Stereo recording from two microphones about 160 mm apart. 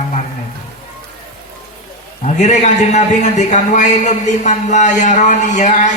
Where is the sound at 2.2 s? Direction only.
45° left (ahead or behind).